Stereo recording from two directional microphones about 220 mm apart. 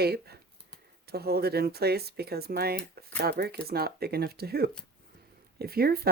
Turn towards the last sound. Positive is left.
turn(degrees=-45)  # may be behind; listen again after turning